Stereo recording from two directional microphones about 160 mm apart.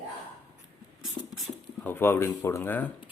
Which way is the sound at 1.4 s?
10° left (ahead or behind).